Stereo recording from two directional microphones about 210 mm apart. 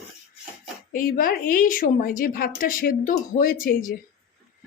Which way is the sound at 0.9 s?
40° left (ahead or behind).